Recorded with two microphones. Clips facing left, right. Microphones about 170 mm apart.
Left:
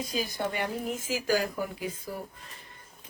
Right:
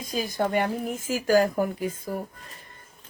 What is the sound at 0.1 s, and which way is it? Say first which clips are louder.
Speech: right 10 dB; 45° right (ahead or behind).